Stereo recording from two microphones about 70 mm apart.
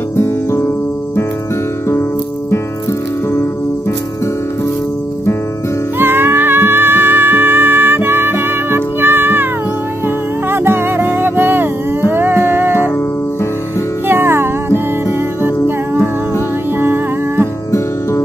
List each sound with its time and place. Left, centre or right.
0.1 s music: left
2.5 s music: left
5.9 s music: right
14.0 s music: right
17.6 s music: left